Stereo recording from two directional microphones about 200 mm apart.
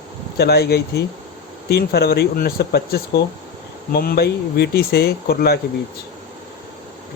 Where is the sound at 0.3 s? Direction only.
55° left (ahead or behind).